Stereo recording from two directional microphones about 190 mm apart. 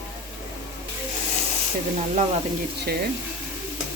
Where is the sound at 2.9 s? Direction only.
55° right (ahead or behind).